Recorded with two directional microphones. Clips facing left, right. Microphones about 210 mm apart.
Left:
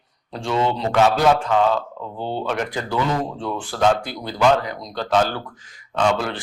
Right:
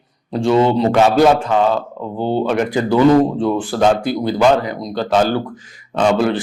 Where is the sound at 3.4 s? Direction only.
10° right (ahead or behind).